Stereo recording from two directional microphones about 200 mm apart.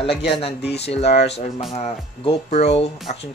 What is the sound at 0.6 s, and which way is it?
Speech, 55° left (ahead or behind).